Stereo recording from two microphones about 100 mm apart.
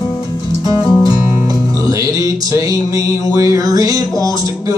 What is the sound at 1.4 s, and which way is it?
Music, 35° right (ahead or behind).